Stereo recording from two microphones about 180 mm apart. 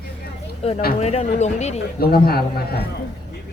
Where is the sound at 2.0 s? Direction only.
55° left (ahead or behind).